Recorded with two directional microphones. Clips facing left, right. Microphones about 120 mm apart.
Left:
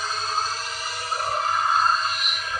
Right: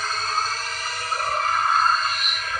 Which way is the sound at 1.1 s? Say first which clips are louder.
Right 1 dB; 10° left (ahead or behind).